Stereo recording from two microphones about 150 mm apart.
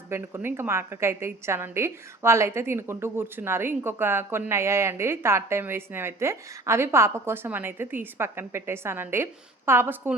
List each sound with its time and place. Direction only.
0.1 s a woman's voice: 15° right (ahead or behind)